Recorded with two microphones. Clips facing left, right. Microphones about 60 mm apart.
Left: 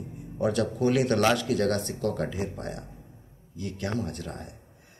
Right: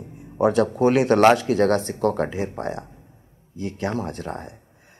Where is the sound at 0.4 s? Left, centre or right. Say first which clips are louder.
Right 7 dB; right.